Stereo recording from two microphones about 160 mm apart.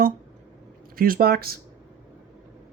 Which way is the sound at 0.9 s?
65° right (ahead or behind).